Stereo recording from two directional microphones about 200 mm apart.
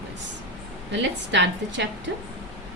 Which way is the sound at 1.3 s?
65° right (ahead or behind).